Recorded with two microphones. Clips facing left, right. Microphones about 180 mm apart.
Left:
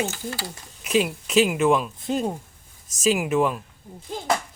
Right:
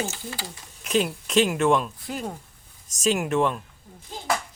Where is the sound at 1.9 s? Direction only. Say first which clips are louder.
Left 7 dB; 20° left (ahead or behind).